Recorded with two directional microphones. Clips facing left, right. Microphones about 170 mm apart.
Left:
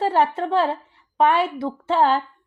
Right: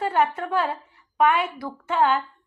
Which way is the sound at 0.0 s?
30° left (ahead or behind).